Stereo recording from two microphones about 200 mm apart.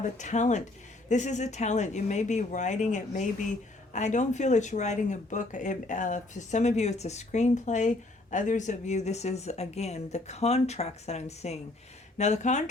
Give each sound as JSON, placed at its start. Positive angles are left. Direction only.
{"t": 0.2, "sound": "speech", "side_deg": 35}